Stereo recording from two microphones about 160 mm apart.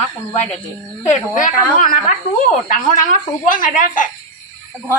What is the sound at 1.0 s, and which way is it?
A woman's voice, 55° left (ahead or behind).